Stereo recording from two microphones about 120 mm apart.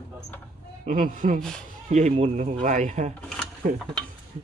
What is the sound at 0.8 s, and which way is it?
Speech, 90° right.